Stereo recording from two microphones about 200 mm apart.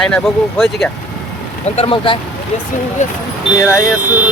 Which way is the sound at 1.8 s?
25° left (ahead or behind).